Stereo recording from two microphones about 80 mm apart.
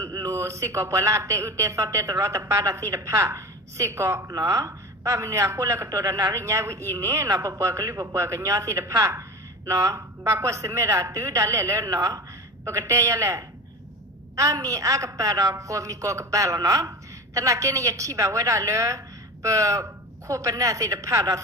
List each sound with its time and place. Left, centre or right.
0.0 s a man's voice: right
4.3 s a man's voice: right